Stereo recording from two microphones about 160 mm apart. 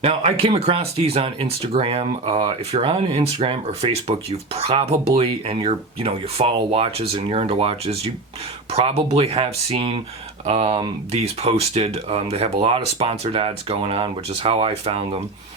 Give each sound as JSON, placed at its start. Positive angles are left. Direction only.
{"t": 0.0, "sound": "speech", "side_deg": -40}